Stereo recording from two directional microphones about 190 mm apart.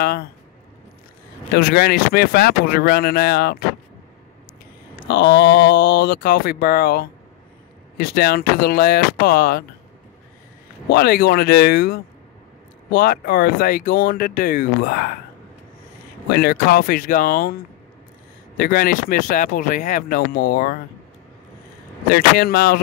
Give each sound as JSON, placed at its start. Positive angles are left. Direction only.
{"t": 1.5, "sound": "speech", "side_deg": 55}
{"t": 5.1, "sound": "speech", "side_deg": 60}
{"t": 10.9, "sound": "speech", "side_deg": 55}
{"t": 16.3, "sound": "speech", "side_deg": 55}
{"t": 18.6, "sound": "speech", "side_deg": 50}
{"t": 22.1, "sound": "speech", "side_deg": 55}